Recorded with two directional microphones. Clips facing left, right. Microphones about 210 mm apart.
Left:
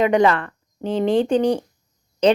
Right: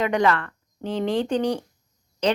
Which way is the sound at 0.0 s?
20° left (ahead or behind).